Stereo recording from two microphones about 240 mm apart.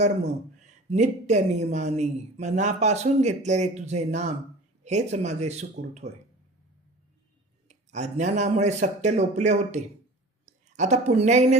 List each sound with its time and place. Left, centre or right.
0.6 s speech: right
7.7 s a woman's voice: right